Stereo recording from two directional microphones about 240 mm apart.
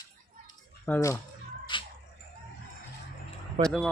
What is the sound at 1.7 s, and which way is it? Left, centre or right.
Dog, centre.